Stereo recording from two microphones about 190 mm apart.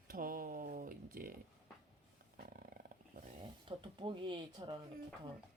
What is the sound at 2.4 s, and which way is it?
Wild animals, 50° right (ahead or behind).